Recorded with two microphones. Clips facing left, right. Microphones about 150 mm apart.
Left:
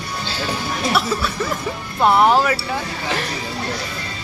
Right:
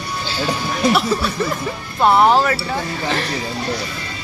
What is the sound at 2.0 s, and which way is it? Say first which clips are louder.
Speech: right 1 dB; 20° right (ahead or behind).